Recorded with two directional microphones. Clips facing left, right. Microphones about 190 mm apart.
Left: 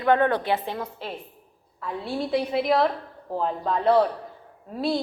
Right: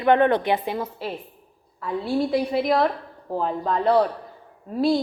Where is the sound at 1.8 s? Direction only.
Centre (ahead or behind).